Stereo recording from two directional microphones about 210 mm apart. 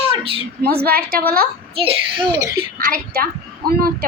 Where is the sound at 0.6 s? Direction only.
45° right (ahead or behind).